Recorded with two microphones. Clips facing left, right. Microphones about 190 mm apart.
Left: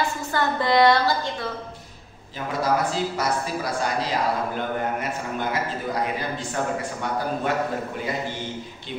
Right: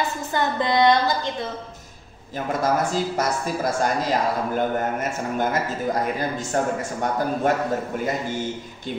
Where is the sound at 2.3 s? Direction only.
45° right (ahead or behind).